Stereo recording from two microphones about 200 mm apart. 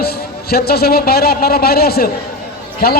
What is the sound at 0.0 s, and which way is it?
A man's voice, 50° left (ahead or behind).